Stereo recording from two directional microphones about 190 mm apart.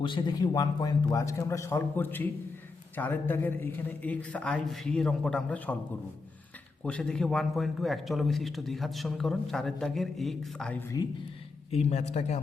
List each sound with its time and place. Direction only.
0.0 s a man's voice: 25° left (ahead or behind); by 5.7 s 5° left (ahead or behind)
6.8 s a man's voice: 5° left (ahead or behind)
11.7 s a man's voice: 35° left (ahead or behind)